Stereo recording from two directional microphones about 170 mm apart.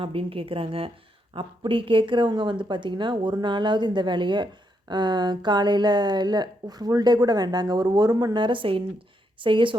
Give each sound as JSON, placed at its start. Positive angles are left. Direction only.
{"t": 0.0, "sound": "a woman's voice", "side_deg": -30}